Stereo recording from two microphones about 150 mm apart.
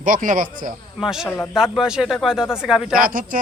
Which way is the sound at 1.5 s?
5° right (ahead or behind).